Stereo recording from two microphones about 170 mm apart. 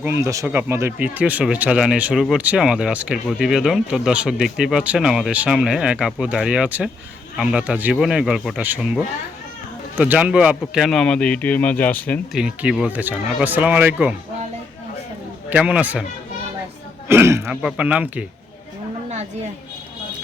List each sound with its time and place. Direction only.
0.0 s speech: 15° right (ahead or behind); by 12.2 s 10° left (ahead or behind)
12.3 s speech: 5° right (ahead or behind)
15.4 s speech: 5° right (ahead or behind)
17.1 s speech: 15° right (ahead or behind)
17.5 s speech: 5° right (ahead or behind)